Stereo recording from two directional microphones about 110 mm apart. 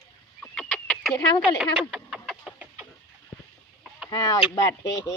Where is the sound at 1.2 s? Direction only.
40° left (ahead or behind).